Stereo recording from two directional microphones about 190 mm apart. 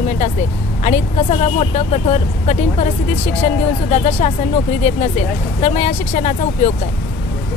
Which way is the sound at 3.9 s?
35° left (ahead or behind).